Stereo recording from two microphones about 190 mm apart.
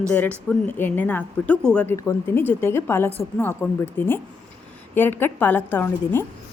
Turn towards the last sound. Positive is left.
turn(degrees=10)  # may be behind; listen again after turning